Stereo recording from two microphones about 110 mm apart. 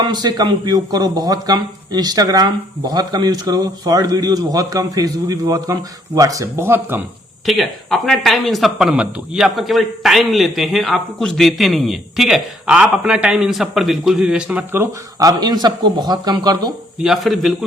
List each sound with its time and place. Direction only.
0.0 s a man's voice: 40° right (ahead or behind); by 7.0 s 20° right (ahead or behind)
7.4 s speech: centre (ahead or behind)
15.2 s a man's voice: 35° right (ahead or behind)
17.0 s speech: centre (ahead or behind)